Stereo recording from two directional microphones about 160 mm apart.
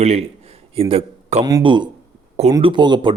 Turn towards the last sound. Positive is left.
turn(degrees=-30)  # may be behind; listen again after turning